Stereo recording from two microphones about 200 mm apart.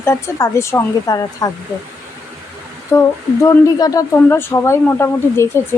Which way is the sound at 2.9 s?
15° left (ahead or behind).